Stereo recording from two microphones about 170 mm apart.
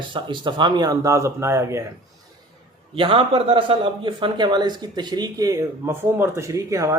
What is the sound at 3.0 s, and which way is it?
Speech, 30° right (ahead or behind).